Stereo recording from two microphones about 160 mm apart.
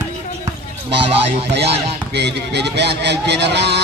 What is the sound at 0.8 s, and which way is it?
Speech, 35° right (ahead or behind).